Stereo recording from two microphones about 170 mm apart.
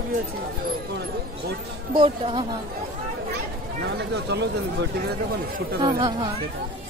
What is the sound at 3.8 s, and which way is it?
Speech, 80° right.